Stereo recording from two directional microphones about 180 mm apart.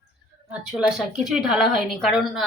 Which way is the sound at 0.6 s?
5° right (ahead or behind).